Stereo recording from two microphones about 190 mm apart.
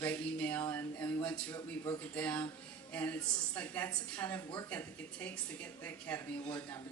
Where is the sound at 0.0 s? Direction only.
10° left (ahead or behind).